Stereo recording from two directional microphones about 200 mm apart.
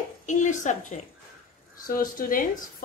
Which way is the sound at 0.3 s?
40° left (ahead or behind).